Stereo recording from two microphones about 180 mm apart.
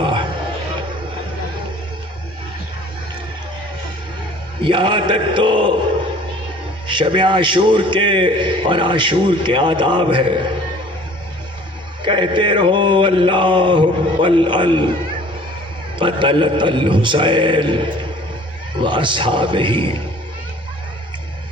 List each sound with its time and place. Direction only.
0.0 s a sound: 25° right (ahead or behind)
4.6 s a man's voice: 25° right (ahead or behind)
6.8 s a man's voice: 25° right (ahead or behind)
12.0 s a man's voice: 25° right (ahead or behind)
16.0 s a man's voice: 25° right (ahead or behind)